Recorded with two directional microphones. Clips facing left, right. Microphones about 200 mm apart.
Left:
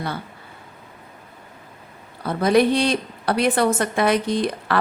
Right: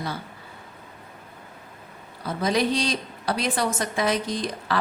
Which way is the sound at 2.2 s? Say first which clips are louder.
Left 6 dB; 60° left (ahead or behind).